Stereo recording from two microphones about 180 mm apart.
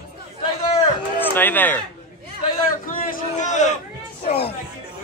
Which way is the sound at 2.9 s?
50° left (ahead or behind).